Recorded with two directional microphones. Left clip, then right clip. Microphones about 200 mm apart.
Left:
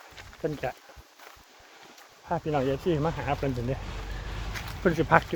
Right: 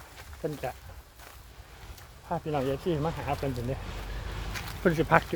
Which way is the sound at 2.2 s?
25° left (ahead or behind).